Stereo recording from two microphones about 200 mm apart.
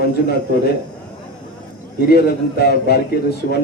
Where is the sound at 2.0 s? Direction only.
50° left (ahead or behind).